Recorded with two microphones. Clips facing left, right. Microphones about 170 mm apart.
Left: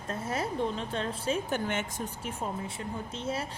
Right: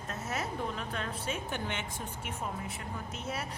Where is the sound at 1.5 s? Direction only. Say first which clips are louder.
Left 6 dB; 45° left (ahead or behind).